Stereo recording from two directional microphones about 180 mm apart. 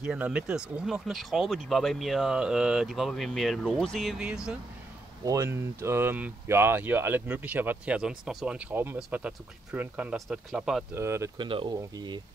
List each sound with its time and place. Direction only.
0.0 s speech: 5° right (ahead or behind)
5.2 s speech: 15° right (ahead or behind); by 10.9 s centre (ahead or behind)
11.0 s speech: 15° right (ahead or behind)
11.4 s speech: 30° right (ahead or behind)